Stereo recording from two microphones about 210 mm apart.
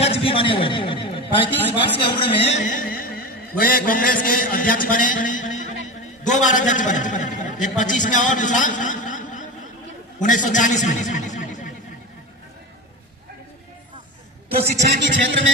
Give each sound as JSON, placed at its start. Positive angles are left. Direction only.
{"t": 0.0, "sound": "a man's voice", "side_deg": 25}
{"t": 3.6, "sound": "a sound", "side_deg": 45}
{"t": 6.2, "sound": "a man's voice", "side_deg": 35}
{"t": 14.8, "sound": "speech", "side_deg": -60}